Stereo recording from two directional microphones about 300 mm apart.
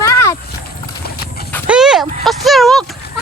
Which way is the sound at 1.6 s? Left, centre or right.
Centre.